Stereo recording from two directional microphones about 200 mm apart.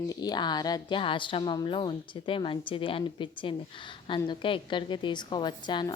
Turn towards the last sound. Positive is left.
turn(degrees=20)  # may be behind; listen again after turning